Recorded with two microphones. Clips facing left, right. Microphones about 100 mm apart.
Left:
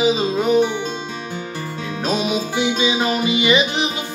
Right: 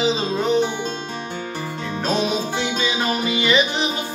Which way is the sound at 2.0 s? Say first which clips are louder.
Left 1 dB; 10° left (ahead or behind).